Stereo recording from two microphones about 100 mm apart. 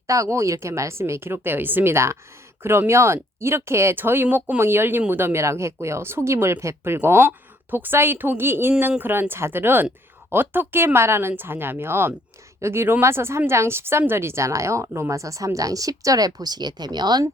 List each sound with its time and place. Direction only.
0.1 s speech: 30° right (ahead or behind)